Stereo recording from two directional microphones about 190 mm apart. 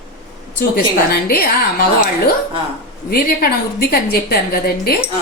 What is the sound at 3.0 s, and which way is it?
A woman's voice, 50° left (ahead or behind).